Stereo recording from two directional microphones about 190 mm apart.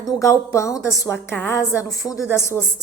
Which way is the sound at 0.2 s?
15° left (ahead or behind).